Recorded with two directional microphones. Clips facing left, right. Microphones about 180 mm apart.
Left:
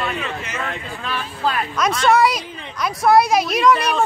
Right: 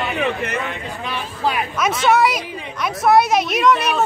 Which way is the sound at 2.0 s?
5° right (ahead or behind).